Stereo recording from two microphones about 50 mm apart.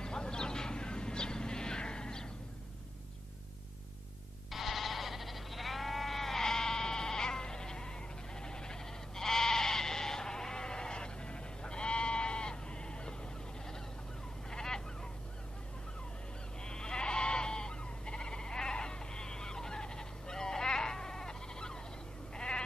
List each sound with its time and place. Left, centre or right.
0.0 s vehicle: centre
4.5 s sheep: centre
16.6 s goat: centre
22.3 s sheep: centre